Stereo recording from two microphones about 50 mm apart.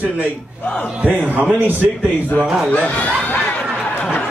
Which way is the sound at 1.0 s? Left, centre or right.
Right.